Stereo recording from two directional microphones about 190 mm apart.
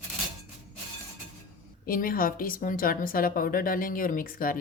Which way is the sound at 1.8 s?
50° left (ahead or behind).